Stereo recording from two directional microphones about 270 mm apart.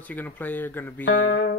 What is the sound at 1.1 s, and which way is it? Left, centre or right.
Speech, left.